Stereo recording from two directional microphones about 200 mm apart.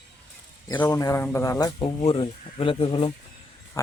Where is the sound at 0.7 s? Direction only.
10° left (ahead or behind); by 3.1 s 25° left (ahead or behind).